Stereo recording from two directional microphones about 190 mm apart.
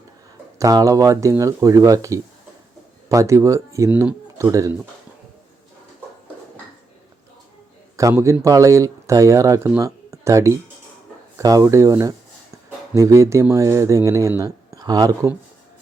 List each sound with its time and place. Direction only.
0.6 s speech: 20° right (ahead or behind)
7.9 s speech: 15° right (ahead or behind)